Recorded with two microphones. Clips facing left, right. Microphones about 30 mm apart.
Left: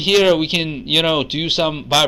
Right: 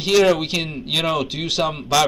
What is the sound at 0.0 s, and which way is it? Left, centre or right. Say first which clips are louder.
A man's voice: left 2 dB; left.